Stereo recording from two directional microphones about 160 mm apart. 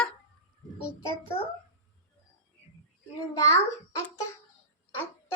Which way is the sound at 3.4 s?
20° left (ahead or behind).